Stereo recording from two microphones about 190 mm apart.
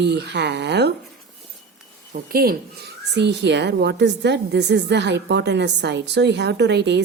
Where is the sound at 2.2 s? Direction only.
55° right (ahead or behind).